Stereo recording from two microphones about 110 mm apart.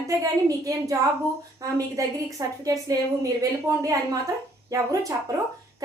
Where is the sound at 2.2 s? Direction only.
30° right (ahead or behind).